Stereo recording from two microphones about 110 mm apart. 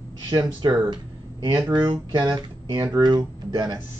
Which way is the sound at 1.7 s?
40° right (ahead or behind).